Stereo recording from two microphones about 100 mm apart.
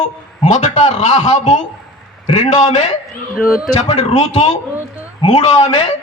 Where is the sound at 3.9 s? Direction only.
90° left.